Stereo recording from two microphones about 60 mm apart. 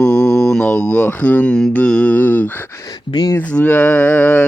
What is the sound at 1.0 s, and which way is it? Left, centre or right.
Speech, left.